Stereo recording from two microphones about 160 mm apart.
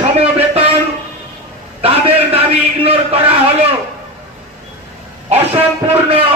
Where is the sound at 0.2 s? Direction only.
40° right (ahead or behind).